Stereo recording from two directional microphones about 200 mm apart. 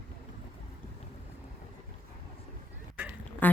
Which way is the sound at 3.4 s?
10° left (ahead or behind).